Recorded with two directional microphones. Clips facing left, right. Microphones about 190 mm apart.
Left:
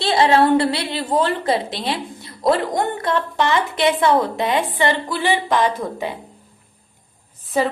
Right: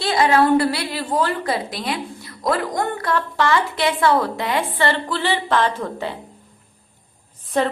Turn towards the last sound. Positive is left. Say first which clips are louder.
# even
turn(degrees=5)  # may be behind; listen again after turning